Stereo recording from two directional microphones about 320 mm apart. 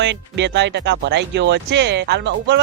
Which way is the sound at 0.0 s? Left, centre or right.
Right.